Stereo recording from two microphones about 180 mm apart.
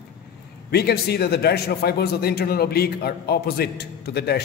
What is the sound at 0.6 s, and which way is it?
A man's voice, 60° left (ahead or behind).